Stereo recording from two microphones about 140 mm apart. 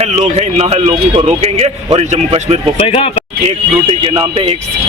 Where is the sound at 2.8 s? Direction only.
45° left (ahead or behind).